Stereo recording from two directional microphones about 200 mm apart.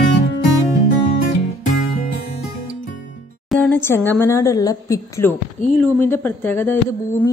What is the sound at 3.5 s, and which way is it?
A woman's voice, 10° left (ahead or behind).